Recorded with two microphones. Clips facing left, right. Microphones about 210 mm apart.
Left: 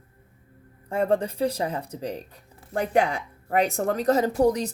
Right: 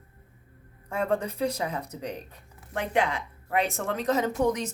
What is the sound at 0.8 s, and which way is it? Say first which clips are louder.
Speech: left 4 dB; 30° left (ahead or behind).